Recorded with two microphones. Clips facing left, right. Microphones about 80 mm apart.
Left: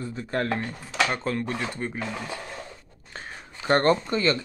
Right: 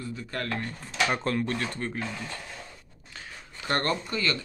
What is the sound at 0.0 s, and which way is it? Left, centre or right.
Speech, left.